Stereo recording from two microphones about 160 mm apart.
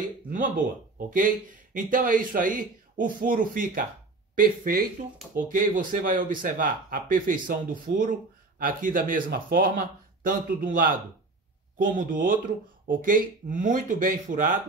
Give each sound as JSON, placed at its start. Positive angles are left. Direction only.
{"t": 0.9, "sound": "speech", "side_deg": -60}